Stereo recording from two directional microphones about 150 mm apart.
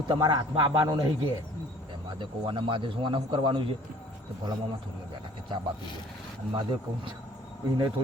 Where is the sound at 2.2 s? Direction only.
35° right (ahead or behind).